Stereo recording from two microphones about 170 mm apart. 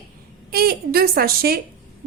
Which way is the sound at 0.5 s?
60° right (ahead or behind).